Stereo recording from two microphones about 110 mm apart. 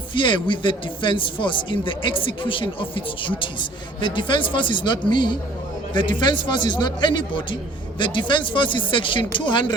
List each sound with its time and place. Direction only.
0.1 s speech: 45° left (ahead or behind)